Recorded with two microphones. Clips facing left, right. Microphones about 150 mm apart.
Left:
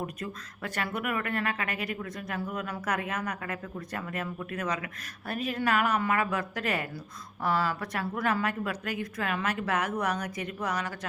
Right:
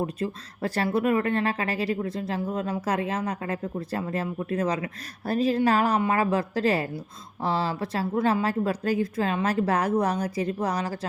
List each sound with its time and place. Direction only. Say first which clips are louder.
0.0 s a woman's voice: right 7 dB; 30° right (ahead or behind)